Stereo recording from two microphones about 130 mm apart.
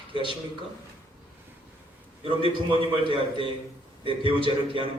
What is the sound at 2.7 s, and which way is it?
A man's voice, 40° right (ahead or behind).